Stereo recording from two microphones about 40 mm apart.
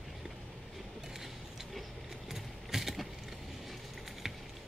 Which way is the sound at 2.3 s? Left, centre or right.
Centre.